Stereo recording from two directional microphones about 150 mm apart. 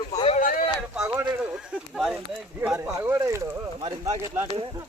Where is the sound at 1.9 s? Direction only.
Centre (ahead or behind).